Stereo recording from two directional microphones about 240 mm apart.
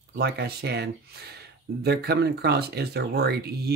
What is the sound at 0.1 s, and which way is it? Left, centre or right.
Speech, right.